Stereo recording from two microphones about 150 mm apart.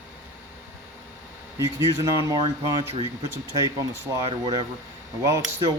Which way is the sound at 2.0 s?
25° right (ahead or behind).